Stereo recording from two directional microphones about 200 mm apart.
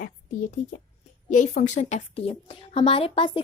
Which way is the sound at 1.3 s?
40° left (ahead or behind).